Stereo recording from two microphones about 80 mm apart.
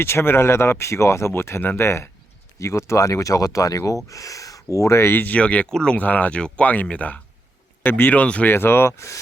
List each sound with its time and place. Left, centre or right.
0.0 s speech: left; by 8.5 s centre
8.5 s speech: left